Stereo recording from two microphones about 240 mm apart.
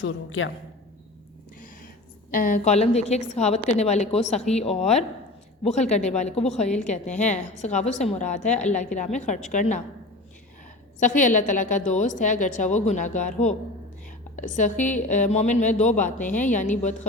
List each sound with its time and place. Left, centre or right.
0.0 s a woman's voice: left
2.3 s a woman's voice: left
11.0 s a woman's voice: left